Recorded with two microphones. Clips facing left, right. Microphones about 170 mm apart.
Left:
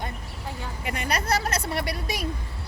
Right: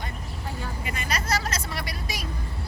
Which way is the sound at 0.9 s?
60° left (ahead or behind).